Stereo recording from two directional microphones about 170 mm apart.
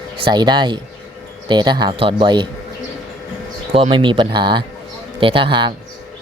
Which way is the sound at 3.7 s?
30° right (ahead or behind).